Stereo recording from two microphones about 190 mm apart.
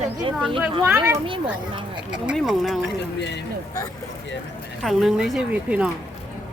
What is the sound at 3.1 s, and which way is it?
Speech, 65° left (ahead or behind).